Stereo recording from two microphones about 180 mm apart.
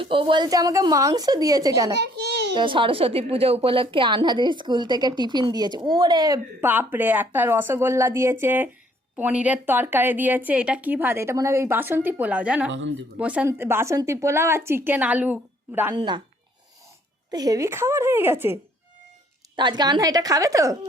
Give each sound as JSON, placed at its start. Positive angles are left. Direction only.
{"t": 0.0, "sound": "a woman's voice", "side_deg": -30}
{"t": 2.0, "sound": "a sound", "side_deg": -70}
{"t": 2.6, "sound": "a woman's voice", "side_deg": -25}
{"t": 12.7, "sound": "speech", "side_deg": -90}
{"t": 13.1, "sound": "a woman's voice", "side_deg": -5}
{"t": 16.0, "sound": "a woman's voice", "side_deg": -25}
{"t": 17.3, "sound": "a woman's voice", "side_deg": -20}
{"t": 19.5, "sound": "a woman's voice", "side_deg": -25}